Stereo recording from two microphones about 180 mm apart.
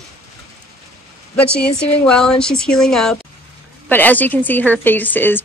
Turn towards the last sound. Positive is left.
turn(degrees=10)  # may be behind; listen again after turning